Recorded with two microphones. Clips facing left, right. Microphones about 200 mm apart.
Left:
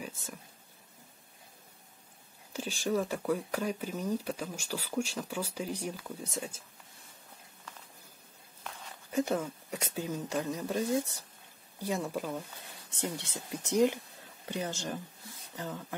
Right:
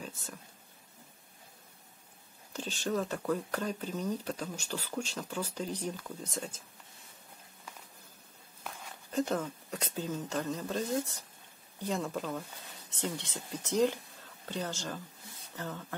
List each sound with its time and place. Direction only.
2.5 s speech: 10° left (ahead or behind)
9.1 s speech: 10° left (ahead or behind)